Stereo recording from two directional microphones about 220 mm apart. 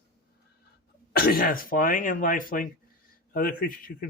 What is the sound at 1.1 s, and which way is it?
Speech, 40° left (ahead or behind).